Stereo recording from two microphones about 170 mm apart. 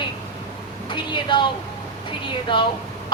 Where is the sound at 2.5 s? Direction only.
30° left (ahead or behind).